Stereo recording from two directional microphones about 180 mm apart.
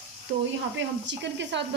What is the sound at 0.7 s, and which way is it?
Speech, 80° right.